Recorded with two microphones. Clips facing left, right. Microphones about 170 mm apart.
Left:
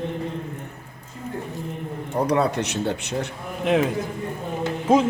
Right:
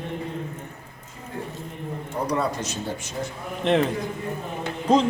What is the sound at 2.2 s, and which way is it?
Speech, 65° left (ahead or behind).